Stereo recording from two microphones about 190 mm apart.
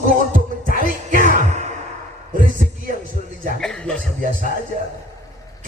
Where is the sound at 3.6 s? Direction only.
5° left (ahead or behind).